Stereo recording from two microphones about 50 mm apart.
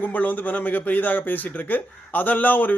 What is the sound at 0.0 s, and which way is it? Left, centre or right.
A man's voice, left.